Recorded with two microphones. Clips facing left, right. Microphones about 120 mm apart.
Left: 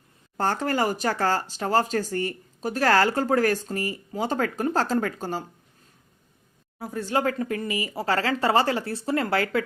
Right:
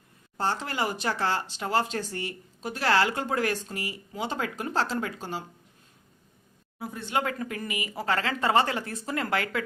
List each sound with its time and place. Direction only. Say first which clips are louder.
0.3 s speech: left 5 dB; 50° left (ahead or behind)
6.7 s speech: left 4 dB; 40° left (ahead or behind)